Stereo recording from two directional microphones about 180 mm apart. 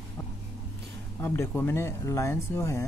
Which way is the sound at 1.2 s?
10° left (ahead or behind).